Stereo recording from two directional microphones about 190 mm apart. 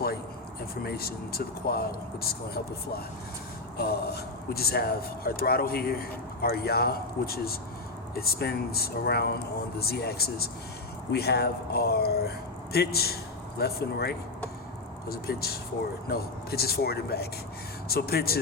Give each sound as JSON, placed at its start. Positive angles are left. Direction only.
{"t": 0.8, "sound": "speech", "side_deg": 55}
{"t": 3.8, "sound": "speech", "side_deg": 55}